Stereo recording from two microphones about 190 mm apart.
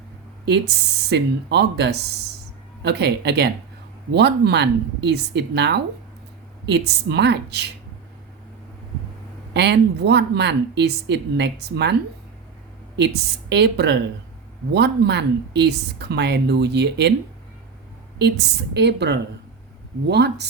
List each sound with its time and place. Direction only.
0.4 s speech: 60° right (ahead or behind)
9.5 s speech: 65° right (ahead or behind)
13.5 s speech: 65° right (ahead or behind)
18.2 s speech: 60° right (ahead or behind)